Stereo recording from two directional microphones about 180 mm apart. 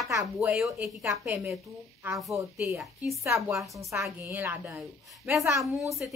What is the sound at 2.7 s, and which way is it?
Speech, centre (ahead or behind).